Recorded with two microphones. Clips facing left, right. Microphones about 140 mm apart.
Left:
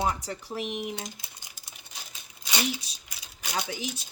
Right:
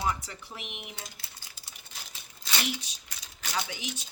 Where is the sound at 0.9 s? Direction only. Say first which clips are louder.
Left 7 dB; 15° left (ahead or behind).